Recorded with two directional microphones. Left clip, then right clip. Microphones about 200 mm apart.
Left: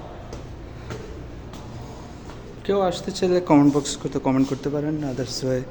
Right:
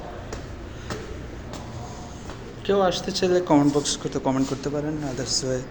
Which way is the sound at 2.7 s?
25° left (ahead or behind).